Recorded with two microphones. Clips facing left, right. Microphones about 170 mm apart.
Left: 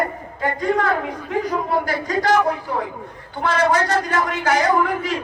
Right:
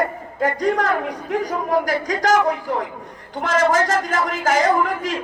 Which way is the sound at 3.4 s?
45° right (ahead or behind).